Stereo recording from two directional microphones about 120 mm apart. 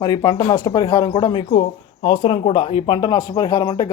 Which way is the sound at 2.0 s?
45° left (ahead or behind).